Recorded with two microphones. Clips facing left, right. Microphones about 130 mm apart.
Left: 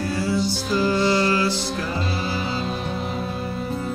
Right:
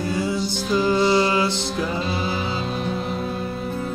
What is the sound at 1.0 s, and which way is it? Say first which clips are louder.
Music: right 2 dB; 15° right (ahead or behind).